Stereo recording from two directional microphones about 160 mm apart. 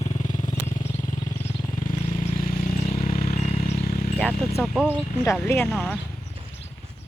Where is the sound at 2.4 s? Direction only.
55° left (ahead or behind).